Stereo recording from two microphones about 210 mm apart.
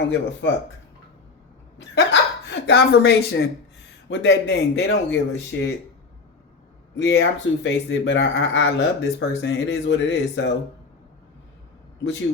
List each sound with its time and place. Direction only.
0.0 s speech: 60° left (ahead or behind)
2.5 s speech: 50° left (ahead or behind)
4.1 s speech: 60° left (ahead or behind)
6.9 s speech: 60° left (ahead or behind)